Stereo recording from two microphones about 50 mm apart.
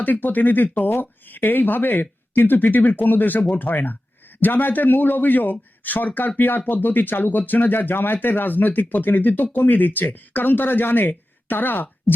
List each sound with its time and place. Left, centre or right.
0.0 s speech: left